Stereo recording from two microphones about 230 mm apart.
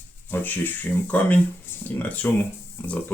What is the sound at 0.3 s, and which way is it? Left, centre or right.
Speech, centre.